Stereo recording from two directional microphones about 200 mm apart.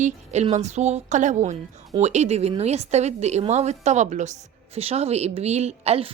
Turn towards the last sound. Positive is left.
turn(degrees=-30)  # may be behind; listen again after turning